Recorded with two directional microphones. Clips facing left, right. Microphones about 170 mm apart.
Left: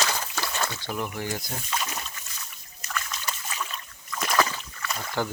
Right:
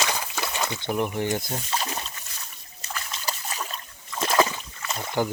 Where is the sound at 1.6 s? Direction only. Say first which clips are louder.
Right 2 dB; 30° right (ahead or behind).